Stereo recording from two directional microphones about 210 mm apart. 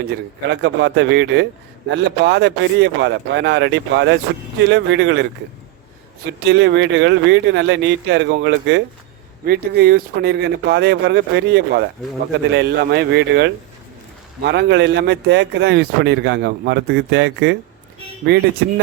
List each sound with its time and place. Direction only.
0.0 s a man's voice: 55° right (ahead or behind)
6.4 s a man's voice: 55° right (ahead or behind)